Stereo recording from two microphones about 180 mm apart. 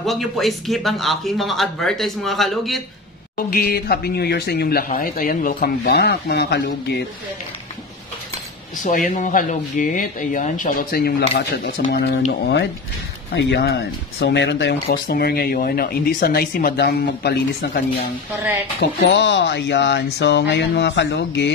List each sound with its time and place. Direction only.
0.0 s speech: centre (ahead or behind)
3.3 s speech: 55° left (ahead or behind)
8.8 s speech: 45° left (ahead or behind); by 12.2 s 65° left (ahead or behind)
13.3 s speech: 80° left
15.0 s speech: 55° left (ahead or behind)
18.8 s speech: 75° left (ahead or behind)